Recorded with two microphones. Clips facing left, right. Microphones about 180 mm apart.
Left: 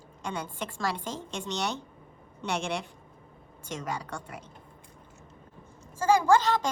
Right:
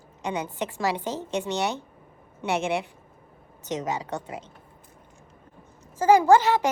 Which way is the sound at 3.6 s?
20° right (ahead or behind).